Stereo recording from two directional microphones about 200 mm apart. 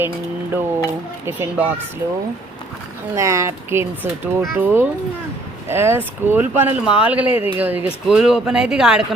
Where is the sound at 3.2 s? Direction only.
15° right (ahead or behind).